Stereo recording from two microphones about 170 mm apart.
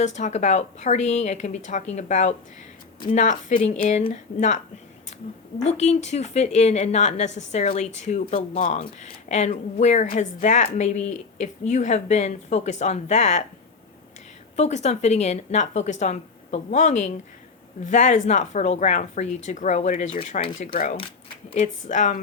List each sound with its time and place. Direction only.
0.0 s speech: 45° left (ahead or behind)
5.6 s a woman's voice: 40° left (ahead or behind)
14.5 s speech: 40° left (ahead or behind)
21.5 s speech: 40° left (ahead or behind)